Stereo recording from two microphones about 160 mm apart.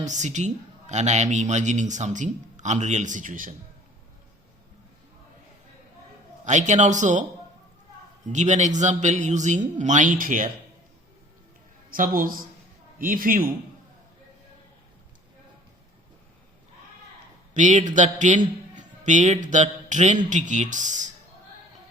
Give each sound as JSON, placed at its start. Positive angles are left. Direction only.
{"t": 0.0, "sound": "a man's voice", "side_deg": -50}
{"t": 6.4, "sound": "a man's voice", "side_deg": -50}
{"t": 8.3, "sound": "a man's voice", "side_deg": -50}
{"t": 11.9, "sound": "speech", "side_deg": -60}
{"t": 17.5, "sound": "a man's voice", "side_deg": -50}